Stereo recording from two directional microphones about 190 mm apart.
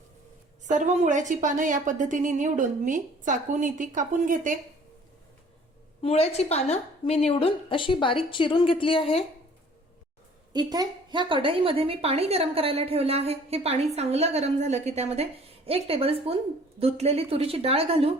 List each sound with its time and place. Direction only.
0.7 s a woman's voice: 40° right (ahead or behind)
6.0 s a woman's voice: 30° left (ahead or behind)
10.5 s a woman's voice: 20° right (ahead or behind)